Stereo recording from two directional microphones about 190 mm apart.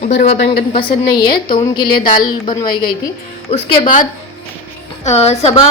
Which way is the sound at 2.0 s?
45° left (ahead or behind).